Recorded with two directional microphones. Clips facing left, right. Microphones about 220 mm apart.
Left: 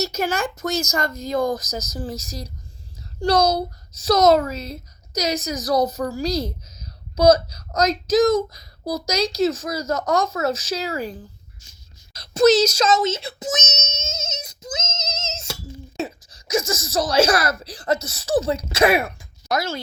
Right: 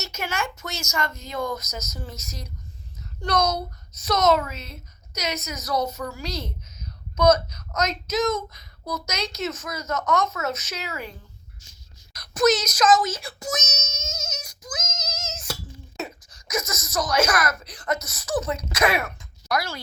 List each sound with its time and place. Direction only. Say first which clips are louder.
0.0 s a woman's voice: left 7 dB; 35° left (ahead or behind)
12.1 s child singing: left 5 dB; 25° left (ahead or behind)
16.0 s speech: left 5 dB; 30° left (ahead or behind)